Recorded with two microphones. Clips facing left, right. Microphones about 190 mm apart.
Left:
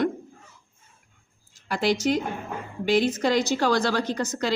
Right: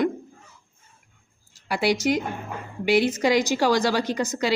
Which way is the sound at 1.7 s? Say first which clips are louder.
Right 1 dB; 10° right (ahead or behind).